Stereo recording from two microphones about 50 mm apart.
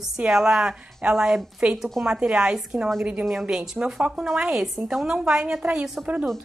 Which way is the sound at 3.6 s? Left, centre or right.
Centre.